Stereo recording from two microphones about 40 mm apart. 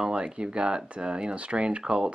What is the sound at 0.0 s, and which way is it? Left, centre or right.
Speech, right.